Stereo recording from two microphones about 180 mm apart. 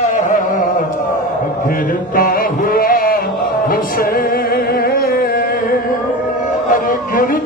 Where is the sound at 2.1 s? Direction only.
50° left (ahead or behind).